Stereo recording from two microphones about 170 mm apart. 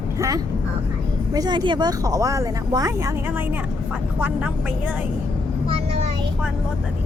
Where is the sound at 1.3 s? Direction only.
25° right (ahead or behind).